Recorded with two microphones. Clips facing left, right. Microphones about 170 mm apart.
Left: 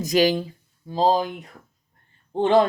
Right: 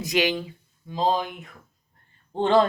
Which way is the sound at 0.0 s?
40° left (ahead or behind).